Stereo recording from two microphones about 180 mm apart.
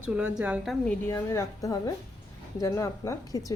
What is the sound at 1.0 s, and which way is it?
A woman's voice, 15° left (ahead or behind).